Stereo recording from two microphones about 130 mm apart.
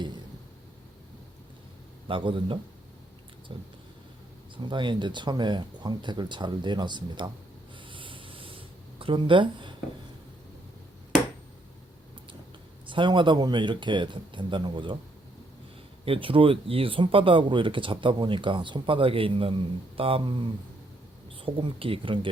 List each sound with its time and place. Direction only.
2.0 s speech: 40° right (ahead or behind)
7.9 s a sound: 40° right (ahead or behind)
12.9 s speech: 40° right (ahead or behind)
16.0 s speech: 45° right (ahead or behind)